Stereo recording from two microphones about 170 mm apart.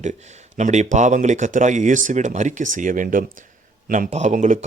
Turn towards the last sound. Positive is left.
turn(degrees=-45)  # may be behind; listen again after turning